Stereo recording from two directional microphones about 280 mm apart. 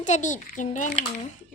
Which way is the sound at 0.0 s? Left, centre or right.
Left.